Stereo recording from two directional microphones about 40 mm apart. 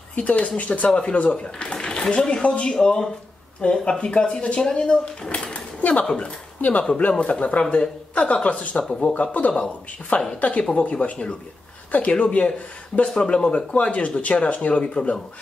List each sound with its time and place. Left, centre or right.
0.1 s speech: left
1.7 s speech: left
5.5 s a sound: left
6.2 s speech: left